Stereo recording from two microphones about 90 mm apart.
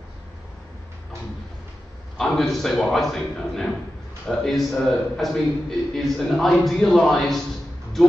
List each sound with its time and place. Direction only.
2.1 s a man's voice: 5° left (ahead or behind)